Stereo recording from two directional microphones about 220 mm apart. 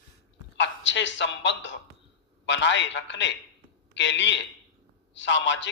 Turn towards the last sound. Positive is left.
turn(degrees=55)  # may be behind; listen again after turning